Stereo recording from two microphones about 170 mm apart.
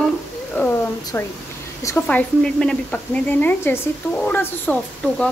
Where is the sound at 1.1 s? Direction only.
10° left (ahead or behind).